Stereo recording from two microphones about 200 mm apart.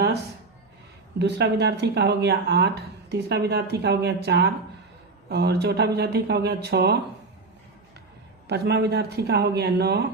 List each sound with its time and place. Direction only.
1.2 s speech: 60° right (ahead or behind)
8.4 s speech: 55° right (ahead or behind)